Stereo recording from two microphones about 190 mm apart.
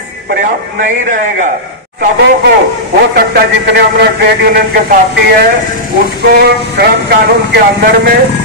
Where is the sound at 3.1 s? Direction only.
55° right (ahead or behind).